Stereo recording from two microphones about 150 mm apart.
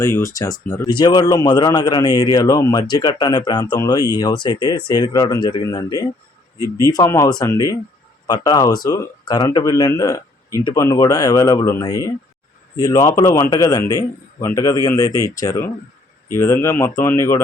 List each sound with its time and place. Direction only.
0.0 s a man's voice: 20° left (ahead or behind)